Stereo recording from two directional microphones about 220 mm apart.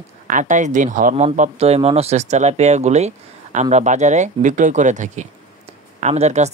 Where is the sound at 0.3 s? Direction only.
35° right (ahead or behind).